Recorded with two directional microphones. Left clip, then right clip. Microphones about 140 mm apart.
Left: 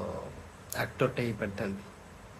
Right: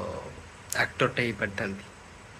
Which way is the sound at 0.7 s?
15° left (ahead or behind).